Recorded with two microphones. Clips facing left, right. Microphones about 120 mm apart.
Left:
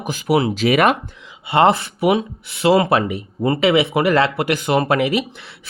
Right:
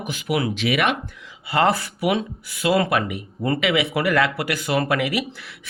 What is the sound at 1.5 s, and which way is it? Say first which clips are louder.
Speech: left 5 dB; 25° left (ahead or behind).